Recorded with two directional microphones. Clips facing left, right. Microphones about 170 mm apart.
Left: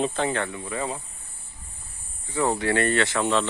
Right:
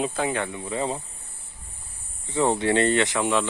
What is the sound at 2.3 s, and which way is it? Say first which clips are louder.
Speech: right 2 dB; 20° right (ahead or behind).